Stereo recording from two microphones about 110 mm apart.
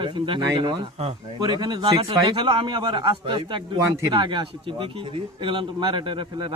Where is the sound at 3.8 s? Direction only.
30° right (ahead or behind).